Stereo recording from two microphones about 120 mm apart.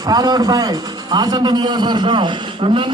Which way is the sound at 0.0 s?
35° right (ahead or behind).